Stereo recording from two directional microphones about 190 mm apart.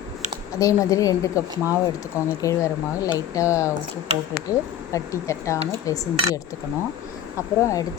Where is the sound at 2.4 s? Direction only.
15° left (ahead or behind).